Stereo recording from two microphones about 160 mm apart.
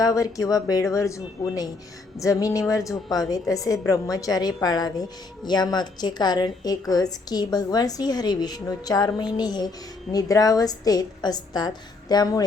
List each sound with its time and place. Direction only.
0.0 s a woman's voice: 20° left (ahead or behind)